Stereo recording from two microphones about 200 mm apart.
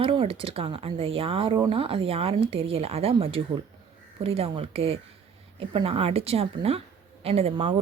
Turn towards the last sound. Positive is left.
turn(degrees=-30)  # may be behind; listen again after turning